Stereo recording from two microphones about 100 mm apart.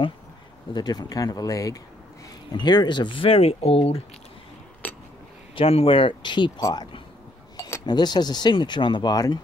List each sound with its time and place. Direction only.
0.7 s speech: 45° left (ahead or behind); by 4.0 s 80° left
5.6 s speech: 75° left (ahead or behind); by 6.9 s 45° left (ahead or behind)
7.5 s cutlery: 30° left (ahead or behind)
7.8 s speech: 45° left (ahead or behind)